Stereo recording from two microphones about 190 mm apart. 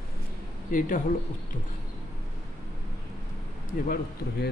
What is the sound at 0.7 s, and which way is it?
Speech, 45° left (ahead or behind).